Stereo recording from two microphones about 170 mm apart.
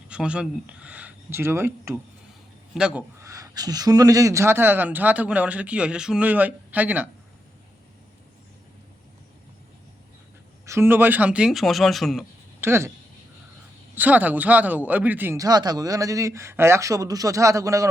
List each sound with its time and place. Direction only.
0.1 s speech: 5° right (ahead or behind)
2.7 s speech: 5° right (ahead or behind)
3.2 s speech: 20° right (ahead or behind)
10.7 s speech: 15° right (ahead or behind)
12.5 s speech: 15° right (ahead or behind)
13.9 s speech: 10° right (ahead or behind)